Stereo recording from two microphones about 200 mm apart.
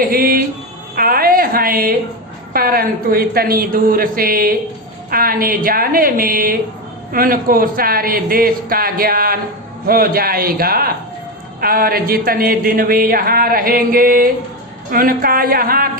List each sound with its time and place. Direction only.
0.0 s a man's voice: 45° right (ahead or behind)